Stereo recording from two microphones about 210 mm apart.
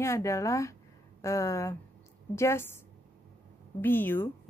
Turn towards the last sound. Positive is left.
turn(degrees=10)  # may be behind; listen again after turning